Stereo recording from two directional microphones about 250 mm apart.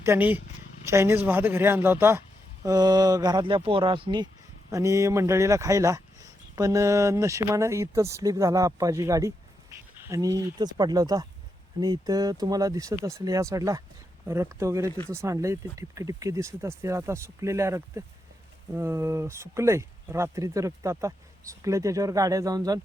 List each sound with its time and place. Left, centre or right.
0.0 s speech: centre